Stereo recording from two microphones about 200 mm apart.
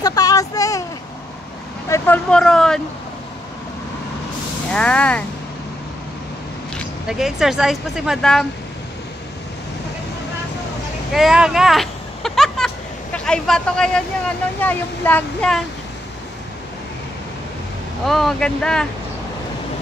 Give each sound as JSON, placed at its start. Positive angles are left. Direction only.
{"t": 0.0, "sound": "a sound", "side_deg": 20}
{"t": 1.9, "sound": "vehicle", "side_deg": 10}
{"t": 4.6, "sound": "speech", "side_deg": 5}
{"t": 6.8, "sound": "speech", "side_deg": 0}
{"t": 11.1, "sound": "vehicle", "side_deg": 0}
{"t": 14.6, "sound": "speech", "side_deg": 10}
{"t": 18.0, "sound": "speech", "side_deg": 0}